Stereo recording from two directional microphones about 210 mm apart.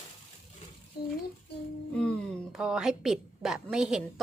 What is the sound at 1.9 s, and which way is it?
A woman's voice, 5° left (ahead or behind).